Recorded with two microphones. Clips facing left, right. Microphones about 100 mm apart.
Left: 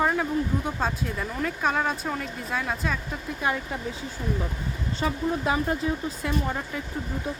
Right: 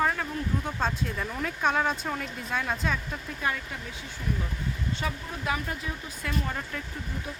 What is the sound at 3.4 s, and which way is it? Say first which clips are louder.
Speech: left 4 dB; 25° left (ahead or behind).